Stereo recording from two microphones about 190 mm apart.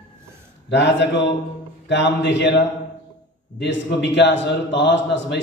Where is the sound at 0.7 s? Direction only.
65° left (ahead or behind).